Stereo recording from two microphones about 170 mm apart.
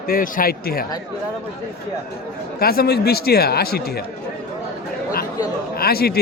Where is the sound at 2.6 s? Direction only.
65° left (ahead or behind).